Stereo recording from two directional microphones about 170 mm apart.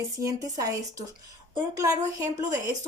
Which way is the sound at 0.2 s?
20° right (ahead or behind).